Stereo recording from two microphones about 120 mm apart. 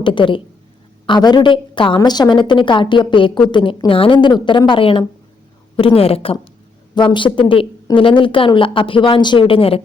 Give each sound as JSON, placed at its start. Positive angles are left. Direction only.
{"t": 0.0, "sound": "a woman's voice", "side_deg": 45}
{"t": 6.9, "sound": "speech", "side_deg": 40}